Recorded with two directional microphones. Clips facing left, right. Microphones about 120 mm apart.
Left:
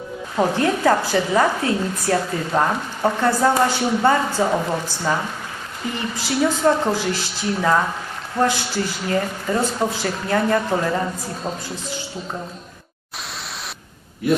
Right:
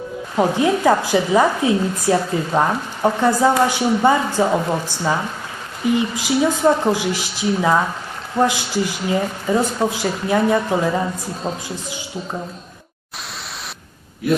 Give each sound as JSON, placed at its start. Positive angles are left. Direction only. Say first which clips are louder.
{"t": 0.3, "sound": "speech", "louder": "right 2 dB", "side_deg": -15}
{"t": 14.3, "sound": "a man's voice", "louder": "right 1 dB", "side_deg": 0}